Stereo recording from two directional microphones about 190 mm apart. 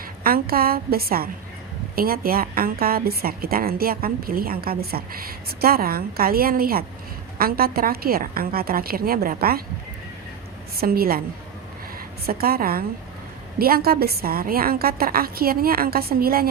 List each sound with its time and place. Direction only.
0.2 s a woman's voice: 50° right (ahead or behind)
10.8 s a woman's voice: 50° right (ahead or behind)
12.2 s a woman's voice: 50° right (ahead or behind)